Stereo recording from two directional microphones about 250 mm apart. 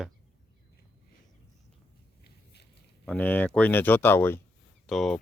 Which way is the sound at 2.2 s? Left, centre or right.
Left.